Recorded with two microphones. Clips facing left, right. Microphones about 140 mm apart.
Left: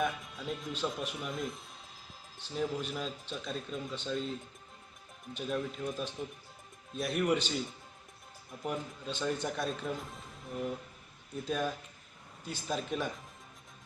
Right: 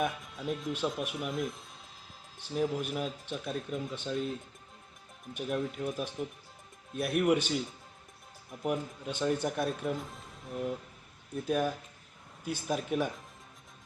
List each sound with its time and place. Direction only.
0.0 s speech: 5° right (ahead or behind)
5.3 s speech: 10° right (ahead or behind)
8.6 s speech: 10° right (ahead or behind)
11.4 s speech: 10° right (ahead or behind)